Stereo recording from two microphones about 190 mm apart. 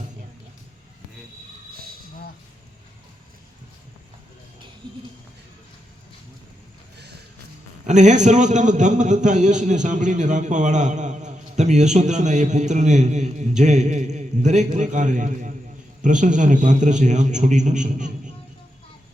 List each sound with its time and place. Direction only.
1.7 s cricket: 50° right (ahead or behind)
6.9 s music: 60° right (ahead or behind)
7.9 s a man's voice: 40° right (ahead or behind)